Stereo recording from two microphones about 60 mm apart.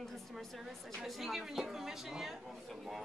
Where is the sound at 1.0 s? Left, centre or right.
Centre.